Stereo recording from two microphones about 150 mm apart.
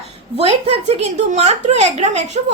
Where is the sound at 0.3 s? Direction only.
45° right (ahead or behind).